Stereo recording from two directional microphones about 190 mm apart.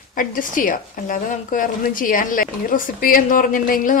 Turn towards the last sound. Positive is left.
turn(degrees=45)  # may be behind; listen again after turning